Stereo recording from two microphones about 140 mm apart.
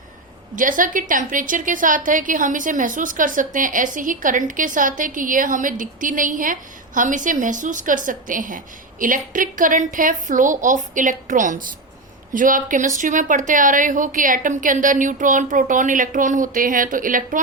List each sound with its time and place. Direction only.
0.5 s a woman's voice: 70° right (ahead or behind)